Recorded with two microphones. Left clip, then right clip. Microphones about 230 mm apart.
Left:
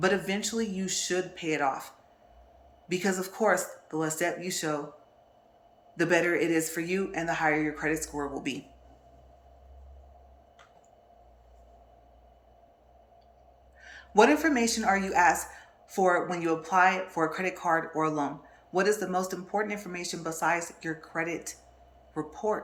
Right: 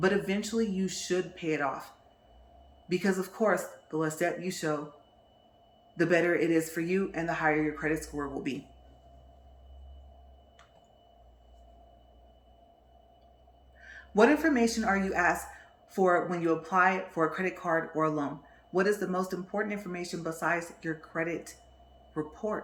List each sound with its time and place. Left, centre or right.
0.0 s a man's voice: centre
2.9 s a man's voice: centre
6.0 s a man's voice: centre
13.8 s a man's voice: right